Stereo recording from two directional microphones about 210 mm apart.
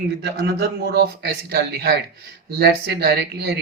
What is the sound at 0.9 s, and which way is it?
A man's voice, 50° right (ahead or behind).